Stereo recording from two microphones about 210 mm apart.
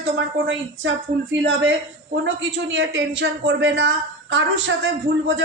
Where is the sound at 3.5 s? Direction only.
60° right (ahead or behind).